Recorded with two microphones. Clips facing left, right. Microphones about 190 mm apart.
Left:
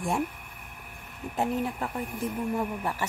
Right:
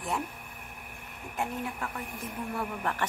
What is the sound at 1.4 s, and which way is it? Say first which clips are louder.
Speech: left 5 dB; 30° left (ahead or behind).